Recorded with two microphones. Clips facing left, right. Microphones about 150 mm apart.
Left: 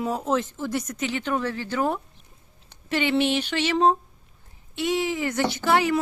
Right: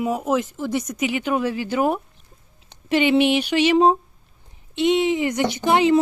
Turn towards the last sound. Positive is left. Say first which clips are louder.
# right 5 dB
turn(degrees=-20)  # may be behind; listen again after turning